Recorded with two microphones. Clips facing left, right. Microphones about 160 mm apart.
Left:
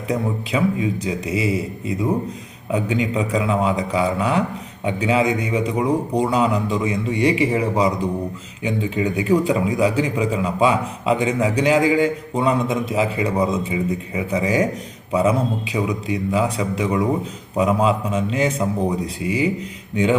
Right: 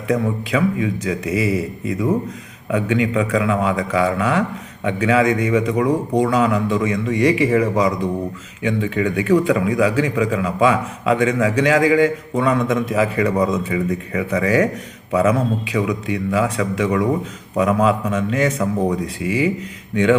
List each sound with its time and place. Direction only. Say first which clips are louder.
0.1 s speech: right 3 dB; 30° left (ahead or behind)
2.7 s a man's voice: right 3 dB; 35° left (ahead or behind)
14.3 s speech: right 2 dB; 30° left (ahead or behind)